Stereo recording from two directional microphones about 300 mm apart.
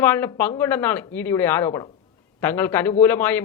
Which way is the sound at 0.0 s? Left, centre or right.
Centre.